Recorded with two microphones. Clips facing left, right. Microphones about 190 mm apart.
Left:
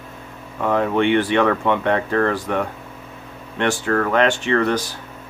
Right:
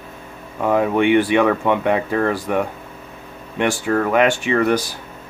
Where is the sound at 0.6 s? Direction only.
10° right (ahead or behind).